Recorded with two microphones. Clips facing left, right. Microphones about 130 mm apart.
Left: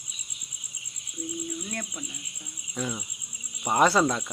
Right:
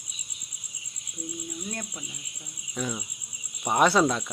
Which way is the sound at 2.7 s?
Centre (ahead or behind).